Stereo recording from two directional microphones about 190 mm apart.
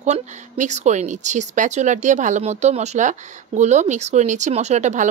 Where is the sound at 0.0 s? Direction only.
40° right (ahead or behind).